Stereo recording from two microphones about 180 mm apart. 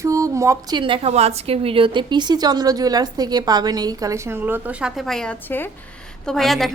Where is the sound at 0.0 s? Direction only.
15° right (ahead or behind).